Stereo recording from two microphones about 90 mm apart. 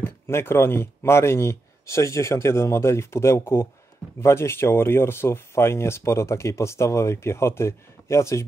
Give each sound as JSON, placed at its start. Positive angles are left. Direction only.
{"t": 0.0, "sound": "speech", "side_deg": 25}